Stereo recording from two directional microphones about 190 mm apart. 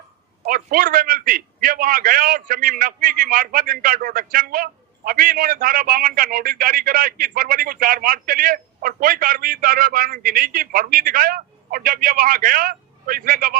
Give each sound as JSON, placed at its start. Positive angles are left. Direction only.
{"t": 0.4, "sound": "a man's voice", "side_deg": -50}